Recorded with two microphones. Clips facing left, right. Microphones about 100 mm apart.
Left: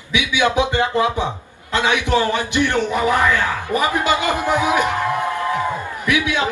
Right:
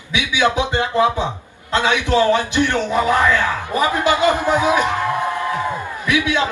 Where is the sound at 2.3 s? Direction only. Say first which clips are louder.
Right 2 dB; 20° right (ahead or behind).